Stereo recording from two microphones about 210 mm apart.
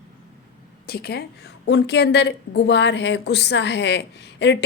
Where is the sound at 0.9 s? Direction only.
50° left (ahead or behind).